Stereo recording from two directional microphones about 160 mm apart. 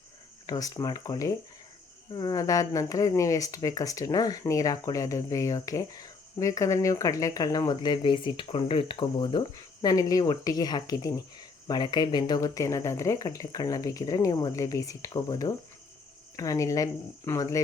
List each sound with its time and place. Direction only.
0.4 s speech: 20° left (ahead or behind)